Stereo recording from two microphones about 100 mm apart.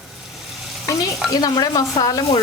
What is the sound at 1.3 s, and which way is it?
Speech, 40° left (ahead or behind).